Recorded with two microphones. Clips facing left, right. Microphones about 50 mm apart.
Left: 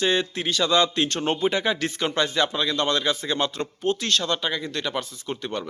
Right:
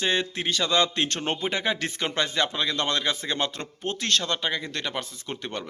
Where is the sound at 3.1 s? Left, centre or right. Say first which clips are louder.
Left 3 dB; right.